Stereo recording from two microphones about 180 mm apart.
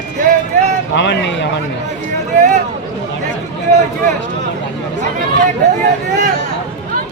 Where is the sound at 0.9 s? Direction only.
80° left.